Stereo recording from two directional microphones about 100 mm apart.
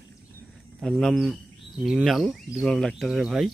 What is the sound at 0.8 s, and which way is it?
Speech, 5° left (ahead or behind).